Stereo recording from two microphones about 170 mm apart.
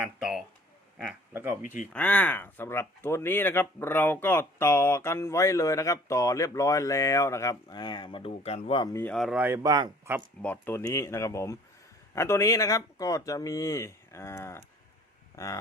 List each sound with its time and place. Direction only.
0.0 s a sound: centre (ahead or behind)
1.3 s speech: 15° right (ahead or behind)
1.9 s speech: 10° left (ahead or behind); by 8.9 s 35° left (ahead or behind)
8.9 s speech: 15° left (ahead or behind)
9.1 s speech: centre (ahead or behind)
9.4 s speech: 15° right (ahead or behind)
10.4 s speech: 10° left (ahead or behind)